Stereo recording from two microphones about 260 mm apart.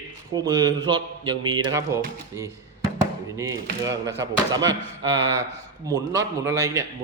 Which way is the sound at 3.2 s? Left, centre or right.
Centre.